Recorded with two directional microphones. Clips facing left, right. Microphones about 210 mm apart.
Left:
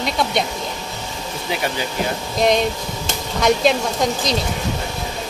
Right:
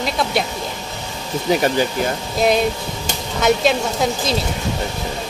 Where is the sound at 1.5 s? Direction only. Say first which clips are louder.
Right 8 dB; 40° right (ahead or behind).